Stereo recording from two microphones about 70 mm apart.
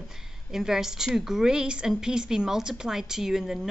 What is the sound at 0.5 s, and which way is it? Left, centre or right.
A woman's voice, centre.